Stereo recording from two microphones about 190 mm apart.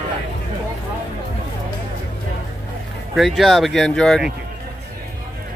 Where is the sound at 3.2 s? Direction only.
Centre (ahead or behind).